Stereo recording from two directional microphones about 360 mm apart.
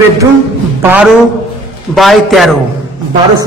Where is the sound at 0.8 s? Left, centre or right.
Centre.